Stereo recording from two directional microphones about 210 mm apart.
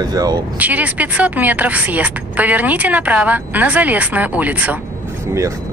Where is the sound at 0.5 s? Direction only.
5° right (ahead or behind).